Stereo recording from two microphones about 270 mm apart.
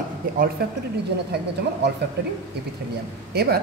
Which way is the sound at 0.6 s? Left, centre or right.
Right.